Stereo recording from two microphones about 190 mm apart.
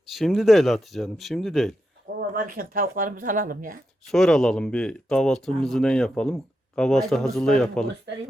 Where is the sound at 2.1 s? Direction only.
45° right (ahead or behind).